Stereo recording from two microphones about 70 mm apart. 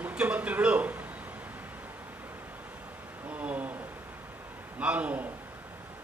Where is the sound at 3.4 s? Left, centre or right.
Right.